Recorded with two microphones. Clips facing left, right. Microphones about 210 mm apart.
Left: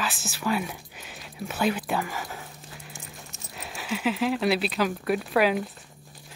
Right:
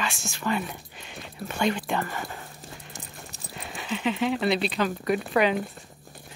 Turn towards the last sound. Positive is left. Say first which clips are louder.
# even
turn(degrees=5)  # may be behind; listen again after turning